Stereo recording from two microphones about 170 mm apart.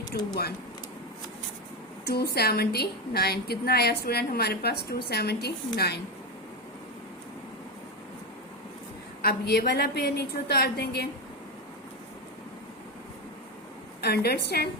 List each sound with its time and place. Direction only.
2.0 s a woman's voice: 65° left (ahead or behind)
9.2 s a woman's voice: 65° left (ahead or behind)
14.0 s a woman's voice: 70° left (ahead or behind)